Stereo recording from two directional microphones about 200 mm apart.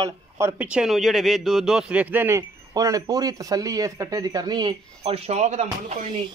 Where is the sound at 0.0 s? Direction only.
15° right (ahead or behind).